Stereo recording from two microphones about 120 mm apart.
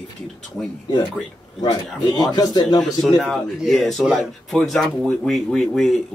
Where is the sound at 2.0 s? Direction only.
35° left (ahead or behind).